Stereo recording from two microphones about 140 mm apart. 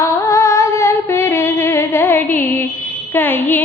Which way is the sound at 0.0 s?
20° left (ahead or behind).